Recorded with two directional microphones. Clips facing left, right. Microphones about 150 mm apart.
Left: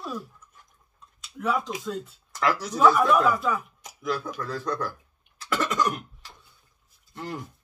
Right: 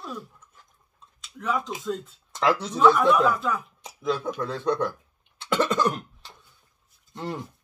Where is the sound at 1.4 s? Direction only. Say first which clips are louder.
Left 1 dB; 5° left (ahead or behind).